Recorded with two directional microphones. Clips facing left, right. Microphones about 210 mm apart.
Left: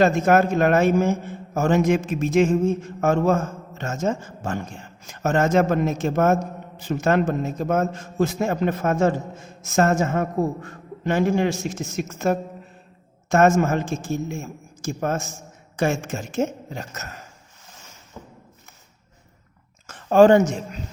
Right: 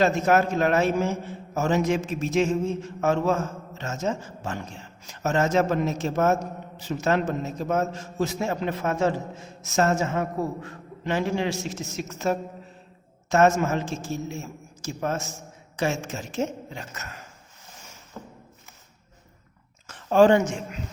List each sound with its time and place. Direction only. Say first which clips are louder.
0.0 s a man's voice: left 3 dB; 50° left (ahead or behind)
18.2 s a sound: right 1 dB; 10° left (ahead or behind)
19.9 s speech: left 4 dB; 50° left (ahead or behind)